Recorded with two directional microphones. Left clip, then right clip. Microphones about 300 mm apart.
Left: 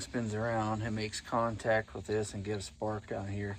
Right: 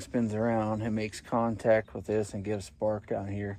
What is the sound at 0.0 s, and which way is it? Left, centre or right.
Speech, right.